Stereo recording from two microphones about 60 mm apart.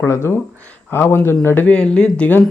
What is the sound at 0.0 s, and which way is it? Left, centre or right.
Speech, left.